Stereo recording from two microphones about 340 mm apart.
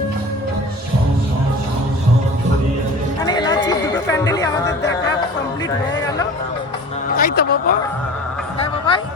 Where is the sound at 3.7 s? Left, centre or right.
Centre.